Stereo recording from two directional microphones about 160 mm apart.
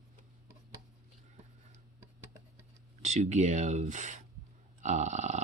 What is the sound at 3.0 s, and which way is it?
Speech, 45° right (ahead or behind).